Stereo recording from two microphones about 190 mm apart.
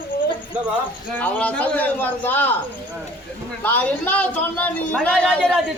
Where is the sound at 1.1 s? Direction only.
10° left (ahead or behind).